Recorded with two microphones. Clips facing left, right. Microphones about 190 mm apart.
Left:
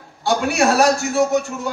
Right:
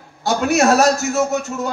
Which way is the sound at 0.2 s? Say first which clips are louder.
Right 2 dB; 40° right (ahead or behind).